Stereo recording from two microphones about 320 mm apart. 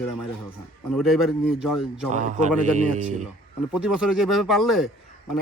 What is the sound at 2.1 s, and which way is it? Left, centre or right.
A man's voice, right.